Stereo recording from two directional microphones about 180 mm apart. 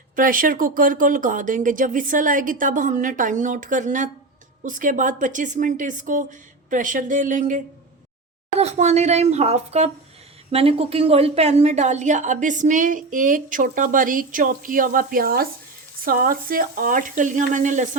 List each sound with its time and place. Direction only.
0.2 s a woman's voice: 50° right (ahead or behind)